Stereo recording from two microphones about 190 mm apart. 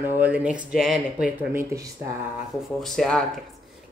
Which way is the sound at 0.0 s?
10° right (ahead or behind).